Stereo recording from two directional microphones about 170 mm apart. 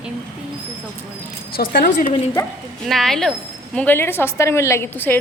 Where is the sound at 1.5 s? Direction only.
60° left (ahead or behind).